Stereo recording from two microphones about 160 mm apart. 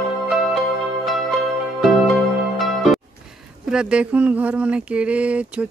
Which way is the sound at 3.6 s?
5° right (ahead or behind).